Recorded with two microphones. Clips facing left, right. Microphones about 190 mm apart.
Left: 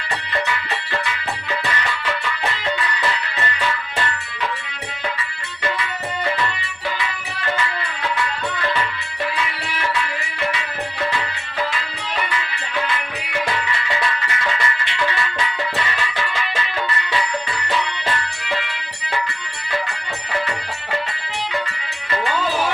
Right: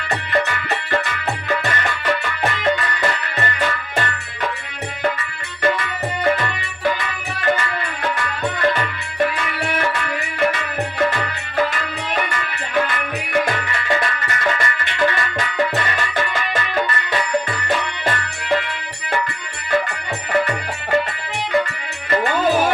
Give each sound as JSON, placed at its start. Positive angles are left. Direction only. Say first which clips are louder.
{"t": 0.4, "sound": "music", "louder": "right 1 dB", "side_deg": -50}
{"t": 5.6, "sound": "music", "louder": "right 5 dB", "side_deg": -50}
{"t": 20.3, "sound": "music", "louder": "right 6 dB", "side_deg": -50}
{"t": 22.1, "sound": "music", "louder": "right 5 dB", "side_deg": -50}